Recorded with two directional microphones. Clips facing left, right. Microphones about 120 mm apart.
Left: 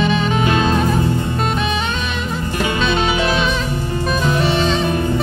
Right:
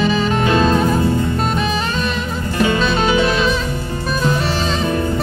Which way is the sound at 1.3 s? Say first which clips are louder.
Right 1 dB; centre (ahead or behind).